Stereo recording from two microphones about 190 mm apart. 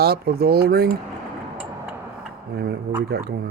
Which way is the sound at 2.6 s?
60° right (ahead or behind).